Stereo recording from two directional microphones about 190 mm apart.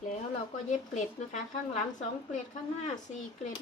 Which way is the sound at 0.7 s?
40° left (ahead or behind).